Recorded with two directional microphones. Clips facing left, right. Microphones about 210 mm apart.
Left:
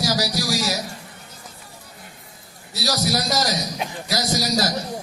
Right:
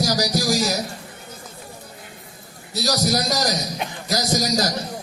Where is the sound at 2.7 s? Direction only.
45° right (ahead or behind).